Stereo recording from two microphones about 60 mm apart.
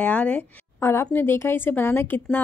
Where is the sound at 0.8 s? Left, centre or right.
Left.